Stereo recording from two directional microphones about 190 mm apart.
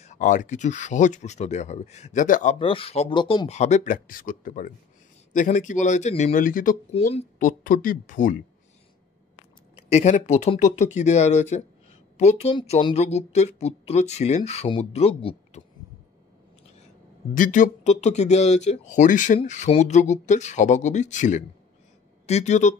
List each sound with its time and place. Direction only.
0.0 s speech: 40° left (ahead or behind)
2.6 s speech: 30° left (ahead or behind); by 8.4 s 45° left (ahead or behind)
9.8 s speech: 35° left (ahead or behind)
17.3 s speech: 45° left (ahead or behind)